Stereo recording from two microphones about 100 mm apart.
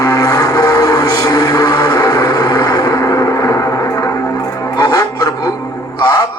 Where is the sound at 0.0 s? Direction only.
40° left (ahead or behind).